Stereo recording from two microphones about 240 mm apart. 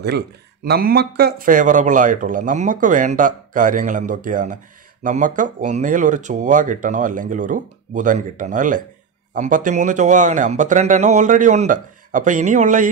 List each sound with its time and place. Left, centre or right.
0.7 s speech: right